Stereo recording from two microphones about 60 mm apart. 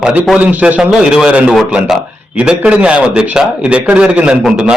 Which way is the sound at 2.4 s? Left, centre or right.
Centre.